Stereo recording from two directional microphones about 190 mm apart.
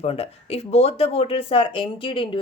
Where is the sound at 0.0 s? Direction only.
30° left (ahead or behind).